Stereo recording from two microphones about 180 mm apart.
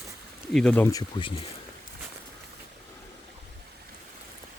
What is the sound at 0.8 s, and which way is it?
Speech, 20° left (ahead or behind).